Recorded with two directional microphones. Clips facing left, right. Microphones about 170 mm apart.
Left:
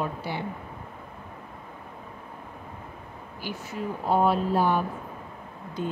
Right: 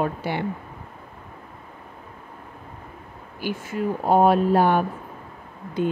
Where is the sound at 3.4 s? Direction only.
75° right (ahead or behind).